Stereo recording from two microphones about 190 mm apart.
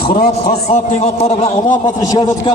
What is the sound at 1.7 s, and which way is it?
Speech, 20° left (ahead or behind).